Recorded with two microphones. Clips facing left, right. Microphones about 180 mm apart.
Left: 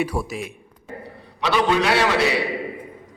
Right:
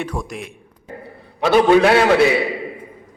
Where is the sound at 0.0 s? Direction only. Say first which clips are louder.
Left 2 dB; 10° left (ahead or behind).